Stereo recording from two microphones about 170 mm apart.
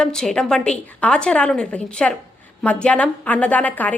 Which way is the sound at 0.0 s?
5° left (ahead or behind).